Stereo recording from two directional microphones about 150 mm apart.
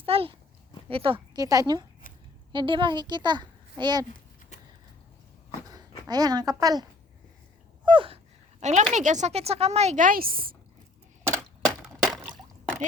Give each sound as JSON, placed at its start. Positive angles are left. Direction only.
{"t": 0.0, "sound": "a child's voice", "side_deg": -40}
{"t": 1.4, "sound": "a child's voice", "side_deg": -25}
{"t": 6.1, "sound": "speech", "side_deg": -25}
{"t": 7.9, "sound": "gasp", "side_deg": -35}
{"t": 8.6, "sound": "speech", "side_deg": -50}
{"t": 12.0, "sound": "a sound", "side_deg": -25}